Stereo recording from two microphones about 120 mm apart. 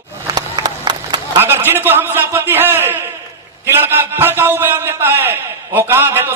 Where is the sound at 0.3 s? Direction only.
35° right (ahead or behind).